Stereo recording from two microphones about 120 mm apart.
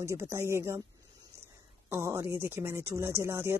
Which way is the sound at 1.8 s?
20° right (ahead or behind).